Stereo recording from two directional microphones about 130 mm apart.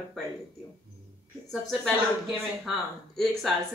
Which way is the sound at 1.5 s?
5° left (ahead or behind).